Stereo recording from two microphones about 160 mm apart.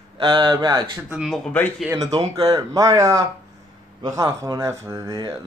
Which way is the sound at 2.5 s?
20° right (ahead or behind).